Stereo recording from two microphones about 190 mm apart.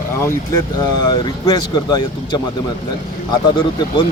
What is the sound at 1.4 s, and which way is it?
Speech, 20° left (ahead or behind).